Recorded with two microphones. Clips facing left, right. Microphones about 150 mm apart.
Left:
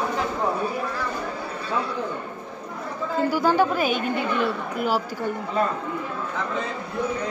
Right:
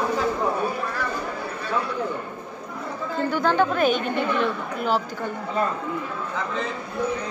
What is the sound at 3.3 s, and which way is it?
A woman's voice, 10° left (ahead or behind).